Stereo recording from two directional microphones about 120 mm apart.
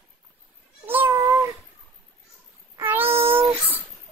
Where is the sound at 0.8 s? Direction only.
20° right (ahead or behind).